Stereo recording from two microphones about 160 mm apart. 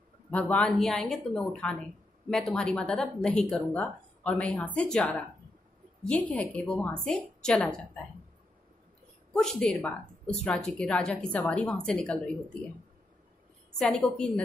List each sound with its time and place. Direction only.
0.3 s a woman's voice: 5° left (ahead or behind)
9.3 s a woman's voice: 5° left (ahead or behind)
13.7 s speech: 5° left (ahead or behind)